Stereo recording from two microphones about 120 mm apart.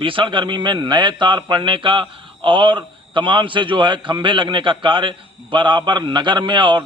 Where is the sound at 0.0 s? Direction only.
45° right (ahead or behind).